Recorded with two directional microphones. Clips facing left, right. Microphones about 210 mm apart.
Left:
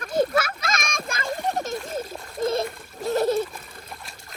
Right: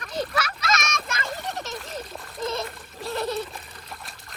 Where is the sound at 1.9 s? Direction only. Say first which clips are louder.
Left 5 dB; 50° left (ahead or behind).